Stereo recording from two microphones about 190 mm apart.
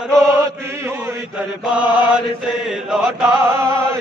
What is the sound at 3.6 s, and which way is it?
Music, 15° right (ahead or behind).